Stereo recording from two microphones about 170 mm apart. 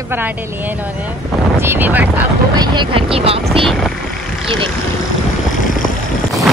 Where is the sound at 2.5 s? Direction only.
30° right (ahead or behind).